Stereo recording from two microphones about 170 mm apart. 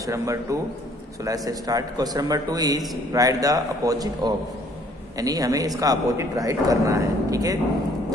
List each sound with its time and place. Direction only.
0.0 s a man's voice: 20° right (ahead or behind)